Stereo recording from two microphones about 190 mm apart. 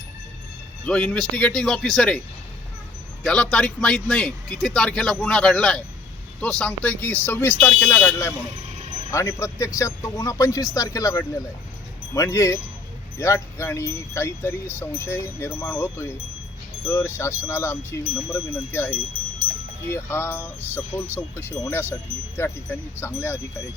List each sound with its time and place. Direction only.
0.9 s speech: 5° left (ahead or behind)
3.2 s speech: 5° left (ahead or behind)